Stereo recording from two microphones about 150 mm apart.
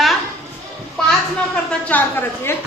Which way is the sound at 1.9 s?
15° left (ahead or behind).